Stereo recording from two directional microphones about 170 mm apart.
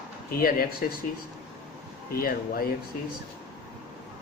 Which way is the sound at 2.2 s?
60° left (ahead or behind).